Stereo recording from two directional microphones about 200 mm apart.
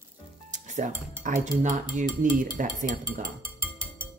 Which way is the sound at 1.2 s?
40° right (ahead or behind).